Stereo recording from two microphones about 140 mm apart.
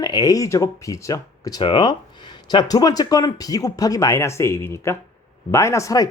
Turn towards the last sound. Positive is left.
turn(degrees=25)  # may be behind; listen again after turning